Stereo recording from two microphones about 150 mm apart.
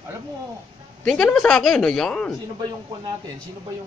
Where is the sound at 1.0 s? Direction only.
5° left (ahead or behind).